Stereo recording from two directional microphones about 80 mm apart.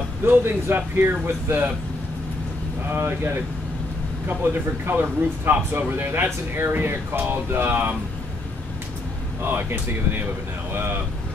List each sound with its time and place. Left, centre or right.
0.2 s speech: right
2.9 s speech: right
9.4 s speech: right